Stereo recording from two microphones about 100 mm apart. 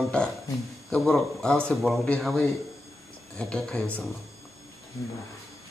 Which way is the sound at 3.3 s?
10° left (ahead or behind).